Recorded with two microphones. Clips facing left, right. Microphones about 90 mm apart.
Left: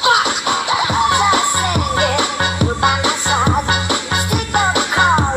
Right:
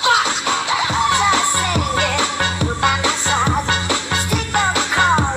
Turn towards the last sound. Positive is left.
turn(degrees=15)  # may be behind; listen again after turning